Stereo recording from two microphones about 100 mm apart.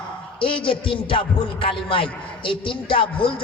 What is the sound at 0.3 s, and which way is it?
A man's voice, 60° left (ahead or behind).